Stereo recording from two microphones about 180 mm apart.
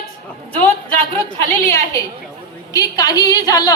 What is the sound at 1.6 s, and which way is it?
A woman's voice, 20° left (ahead or behind).